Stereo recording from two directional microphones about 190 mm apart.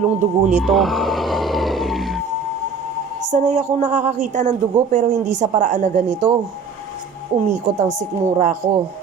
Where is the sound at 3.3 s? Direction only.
40° right (ahead or behind).